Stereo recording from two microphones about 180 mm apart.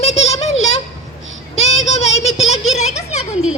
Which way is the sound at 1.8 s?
35° left (ahead or behind).